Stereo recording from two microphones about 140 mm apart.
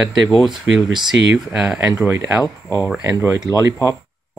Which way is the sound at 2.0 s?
20° right (ahead or behind).